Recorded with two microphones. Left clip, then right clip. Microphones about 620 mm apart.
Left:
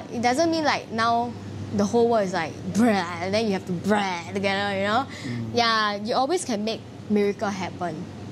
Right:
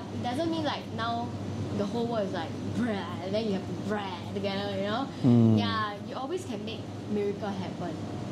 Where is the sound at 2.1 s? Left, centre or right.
Left.